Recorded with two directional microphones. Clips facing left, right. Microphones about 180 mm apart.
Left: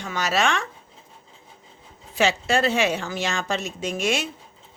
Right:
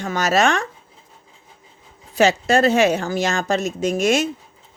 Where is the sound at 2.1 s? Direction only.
40° right (ahead or behind).